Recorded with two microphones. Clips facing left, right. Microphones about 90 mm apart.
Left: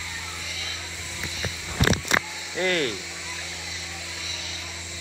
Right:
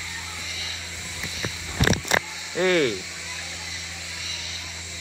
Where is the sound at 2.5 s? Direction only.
20° right (ahead or behind).